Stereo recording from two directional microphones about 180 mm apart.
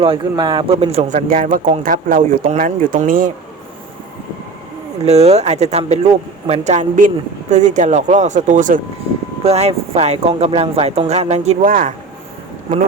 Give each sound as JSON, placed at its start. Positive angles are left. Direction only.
{"t": 0.0, "sound": "speech", "side_deg": -30}
{"t": 5.0, "sound": "speech", "side_deg": -35}